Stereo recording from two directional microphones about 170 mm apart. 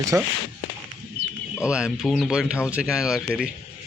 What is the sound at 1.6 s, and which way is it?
A man's voice, 5° right (ahead or behind).